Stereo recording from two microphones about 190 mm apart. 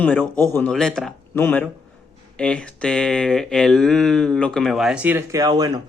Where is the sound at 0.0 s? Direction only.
10° left (ahead or behind).